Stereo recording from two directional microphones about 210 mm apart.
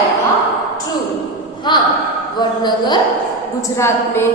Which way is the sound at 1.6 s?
20° left (ahead or behind).